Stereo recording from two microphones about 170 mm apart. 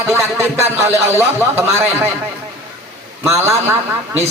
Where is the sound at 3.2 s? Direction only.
15° right (ahead or behind).